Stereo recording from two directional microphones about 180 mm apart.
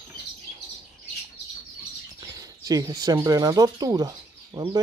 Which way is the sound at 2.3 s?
20° right (ahead or behind).